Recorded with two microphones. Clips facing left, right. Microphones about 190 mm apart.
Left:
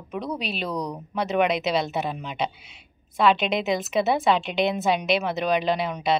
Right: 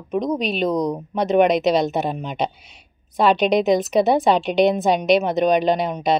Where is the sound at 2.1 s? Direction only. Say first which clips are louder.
Right 4 dB; 45° right (ahead or behind).